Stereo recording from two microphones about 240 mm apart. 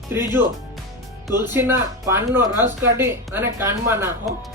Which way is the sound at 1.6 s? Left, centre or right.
Centre.